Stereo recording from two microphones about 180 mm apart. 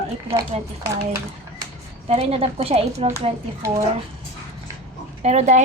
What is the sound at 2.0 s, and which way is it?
A woman's voice, 35° right (ahead or behind).